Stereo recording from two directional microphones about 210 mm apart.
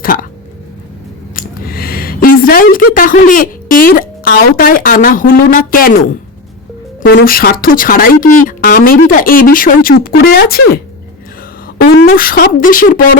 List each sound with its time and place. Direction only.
0.0 s speech: 40° left (ahead or behind)
1.4 s speech: 45° left (ahead or behind)
11.8 s speech: 45° left (ahead or behind)